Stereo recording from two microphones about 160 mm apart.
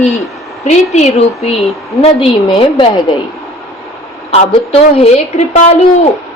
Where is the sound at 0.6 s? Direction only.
40° left (ahead or behind).